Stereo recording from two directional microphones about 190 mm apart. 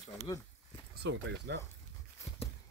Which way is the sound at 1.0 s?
65° right (ahead or behind).